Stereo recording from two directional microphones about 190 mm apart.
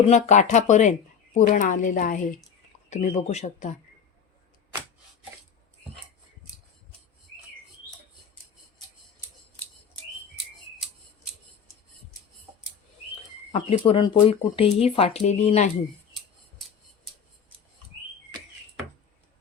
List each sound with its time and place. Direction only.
0.1 s speech: 40° left (ahead or behind)
13.5 s speech: 30° left (ahead or behind)